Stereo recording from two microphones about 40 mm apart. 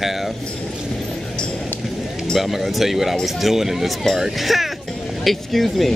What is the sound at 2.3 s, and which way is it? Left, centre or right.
Speech, centre.